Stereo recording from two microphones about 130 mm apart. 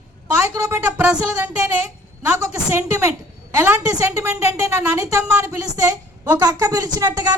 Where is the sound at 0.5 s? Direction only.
25° right (ahead or behind).